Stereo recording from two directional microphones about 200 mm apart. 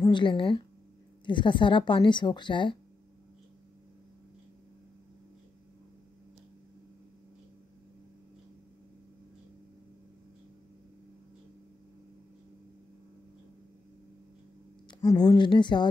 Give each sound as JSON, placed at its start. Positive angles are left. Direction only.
{"t": 0.0, "sound": "speech", "side_deg": 25}
{"t": 14.9, "sound": "speech", "side_deg": 20}